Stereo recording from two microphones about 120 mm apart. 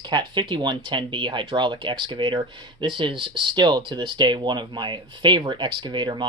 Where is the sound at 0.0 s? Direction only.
40° right (ahead or behind).